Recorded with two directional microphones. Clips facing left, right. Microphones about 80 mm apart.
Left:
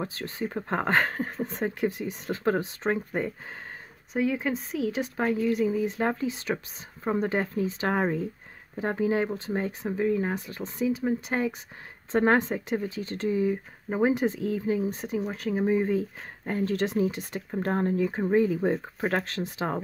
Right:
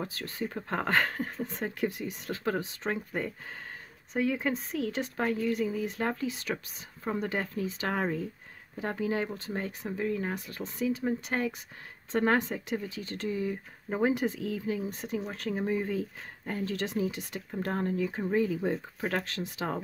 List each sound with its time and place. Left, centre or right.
0.0 s speech: left
4.1 s speech: centre
12.1 s speech: left; by 14.1 s centre
14.1 s speech: left
15.1 s speech: centre
15.6 s speech: left